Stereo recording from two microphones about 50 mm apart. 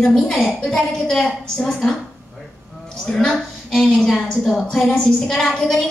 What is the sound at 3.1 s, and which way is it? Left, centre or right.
A woman's voice, centre.